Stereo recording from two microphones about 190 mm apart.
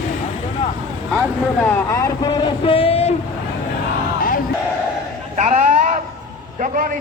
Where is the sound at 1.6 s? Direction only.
15° left (ahead or behind); by 3.2 s 30° left (ahead or behind).